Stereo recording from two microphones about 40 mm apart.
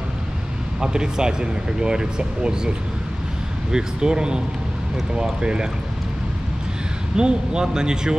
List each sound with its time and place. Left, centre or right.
0.7 s speech: centre
3.7 s speech: centre
7.2 s speech: right